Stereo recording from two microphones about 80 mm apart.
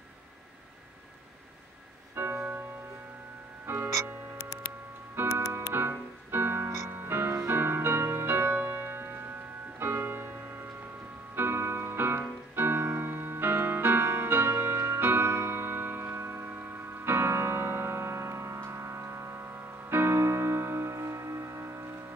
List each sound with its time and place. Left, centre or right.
2.1 s music: right
3.6 s music: right
5.2 s music: right